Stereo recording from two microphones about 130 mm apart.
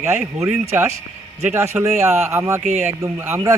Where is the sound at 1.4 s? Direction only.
20° right (ahead or behind).